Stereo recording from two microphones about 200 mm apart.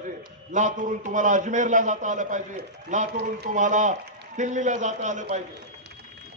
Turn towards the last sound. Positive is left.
turn(degrees=-35)  # may be behind; listen again after turning